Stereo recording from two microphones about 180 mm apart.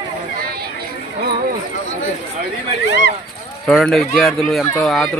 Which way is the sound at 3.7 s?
Centre (ahead or behind).